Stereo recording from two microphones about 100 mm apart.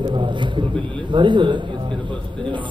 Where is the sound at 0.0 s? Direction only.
50° right (ahead or behind).